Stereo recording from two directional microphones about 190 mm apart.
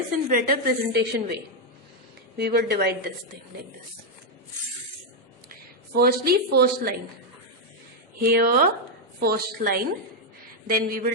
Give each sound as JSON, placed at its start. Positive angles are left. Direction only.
{"t": 0.3, "sound": "a woman's voice", "side_deg": -50}
{"t": 2.4, "sound": "a woman's voice", "side_deg": -55}
{"t": 5.5, "sound": "a woman's voice", "side_deg": -50}
{"t": 8.2, "sound": "a woman's voice", "side_deg": -50}